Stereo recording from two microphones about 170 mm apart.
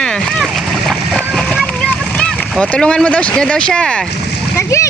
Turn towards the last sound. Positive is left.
turn(degrees=15)  # may be behind; listen again after turning